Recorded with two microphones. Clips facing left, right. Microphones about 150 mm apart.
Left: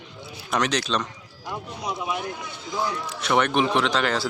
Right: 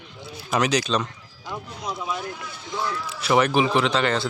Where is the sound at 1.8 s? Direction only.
15° left (ahead or behind).